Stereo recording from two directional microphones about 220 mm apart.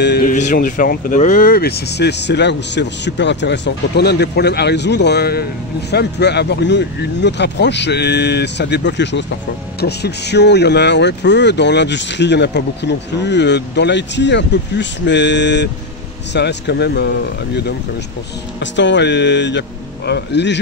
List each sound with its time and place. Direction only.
0.0 s speech: 50° left (ahead or behind)
0.3 s speech: 35° left (ahead or behind); by 17.1 s 50° left (ahead or behind)
18.6 s speech: 55° left (ahead or behind)